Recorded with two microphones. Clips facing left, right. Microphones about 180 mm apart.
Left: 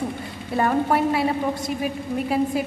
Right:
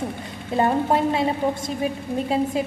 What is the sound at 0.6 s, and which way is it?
A woman's voice, 25° right (ahead or behind).